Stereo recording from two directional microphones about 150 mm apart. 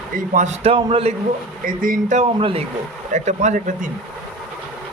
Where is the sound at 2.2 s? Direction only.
40° right (ahead or behind).